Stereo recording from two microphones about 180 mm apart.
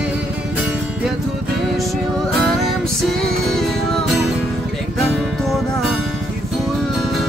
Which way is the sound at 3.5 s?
Centre (ahead or behind).